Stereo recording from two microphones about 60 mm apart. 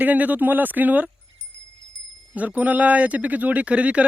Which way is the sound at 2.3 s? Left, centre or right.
Right.